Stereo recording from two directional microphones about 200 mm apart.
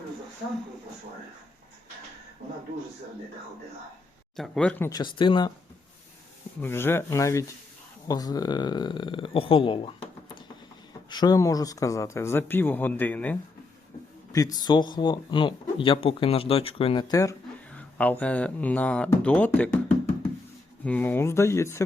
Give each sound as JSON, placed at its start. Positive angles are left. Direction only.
{"t": 4.4, "sound": "speech", "side_deg": 0}
{"t": 4.9, "sound": "speech", "side_deg": 20}
{"t": 6.6, "sound": "speech", "side_deg": 10}
{"t": 14.3, "sound": "speech", "side_deg": 20}
{"t": 17.7, "sound": "speech", "side_deg": 5}
{"t": 20.8, "sound": "speech", "side_deg": 5}